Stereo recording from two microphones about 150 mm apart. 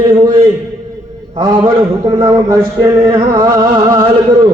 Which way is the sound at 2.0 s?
20° right (ahead or behind).